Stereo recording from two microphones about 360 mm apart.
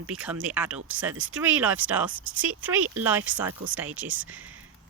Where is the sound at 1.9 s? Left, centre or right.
Centre.